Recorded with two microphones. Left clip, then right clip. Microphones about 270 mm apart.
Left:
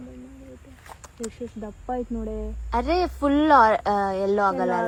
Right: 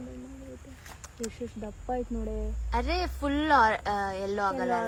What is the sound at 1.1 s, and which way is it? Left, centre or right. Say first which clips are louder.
Speech: left 3 dB; centre.